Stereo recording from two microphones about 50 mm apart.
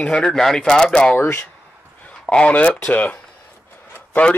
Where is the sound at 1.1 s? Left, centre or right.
Left.